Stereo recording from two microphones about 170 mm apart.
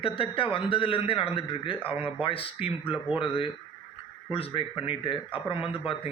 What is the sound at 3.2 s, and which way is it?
Speech, 30° left (ahead or behind).